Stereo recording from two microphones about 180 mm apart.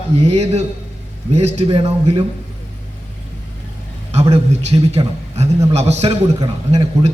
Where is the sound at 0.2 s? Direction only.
35° right (ahead or behind).